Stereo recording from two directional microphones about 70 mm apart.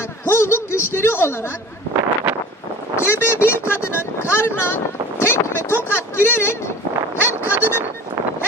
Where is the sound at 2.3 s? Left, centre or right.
Right.